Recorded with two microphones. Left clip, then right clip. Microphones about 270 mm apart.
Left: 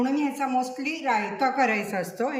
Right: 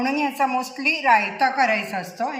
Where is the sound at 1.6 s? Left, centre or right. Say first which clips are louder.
Right 3 dB; centre.